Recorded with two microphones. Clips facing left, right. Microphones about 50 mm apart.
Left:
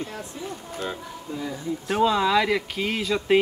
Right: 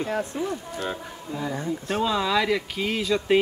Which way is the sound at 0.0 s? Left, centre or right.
Right.